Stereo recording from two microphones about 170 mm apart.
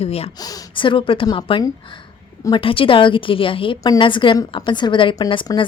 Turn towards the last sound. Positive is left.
turn(degrees=25)  # may be behind; listen again after turning